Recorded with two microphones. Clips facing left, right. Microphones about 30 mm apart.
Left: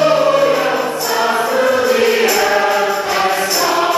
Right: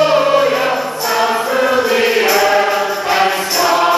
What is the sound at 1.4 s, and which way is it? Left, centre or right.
Mantra, centre.